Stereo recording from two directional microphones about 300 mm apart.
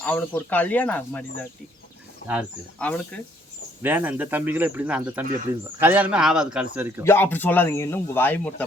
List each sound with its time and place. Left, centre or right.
0.0 s speech: centre
7.0 s speech: centre